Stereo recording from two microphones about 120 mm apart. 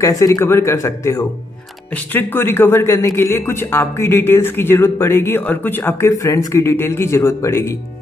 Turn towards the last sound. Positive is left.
turn(degrees=20)  # may be behind; listen again after turning